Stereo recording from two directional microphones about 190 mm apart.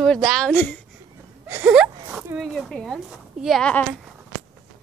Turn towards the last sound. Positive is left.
turn(degrees=5)  # may be behind; listen again after turning